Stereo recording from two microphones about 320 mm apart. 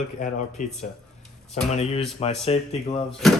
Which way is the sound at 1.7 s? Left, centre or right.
Centre.